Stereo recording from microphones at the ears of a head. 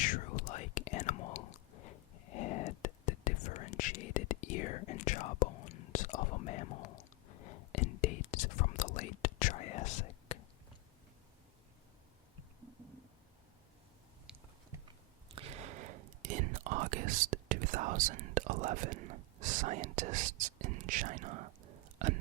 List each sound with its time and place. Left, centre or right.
0.0 s whispering: left
15.3 s whispering: right